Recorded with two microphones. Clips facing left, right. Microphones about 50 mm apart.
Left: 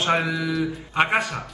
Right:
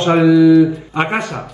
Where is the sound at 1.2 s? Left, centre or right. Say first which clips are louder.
Right 3 dB; right.